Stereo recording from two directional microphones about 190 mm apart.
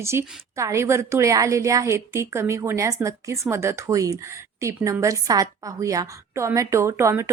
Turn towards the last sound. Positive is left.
turn(degrees=-15)  # may be behind; listen again after turning